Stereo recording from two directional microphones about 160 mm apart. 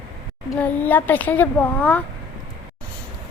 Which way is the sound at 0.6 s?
10° left (ahead or behind).